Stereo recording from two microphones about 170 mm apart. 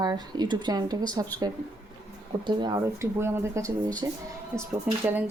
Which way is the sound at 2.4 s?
25° right (ahead or behind).